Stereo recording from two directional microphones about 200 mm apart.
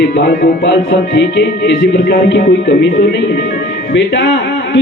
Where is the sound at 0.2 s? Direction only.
60° left (ahead or behind).